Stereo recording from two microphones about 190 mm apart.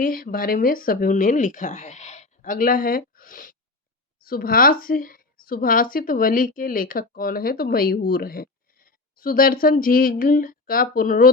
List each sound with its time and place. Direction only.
0.0 s speech: 50° left (ahead or behind)